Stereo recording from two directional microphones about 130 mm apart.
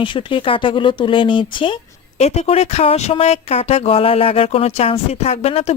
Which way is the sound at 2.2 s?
55° left (ahead or behind).